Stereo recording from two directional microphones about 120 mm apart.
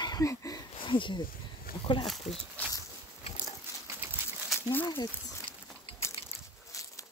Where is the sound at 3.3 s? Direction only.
65° left (ahead or behind).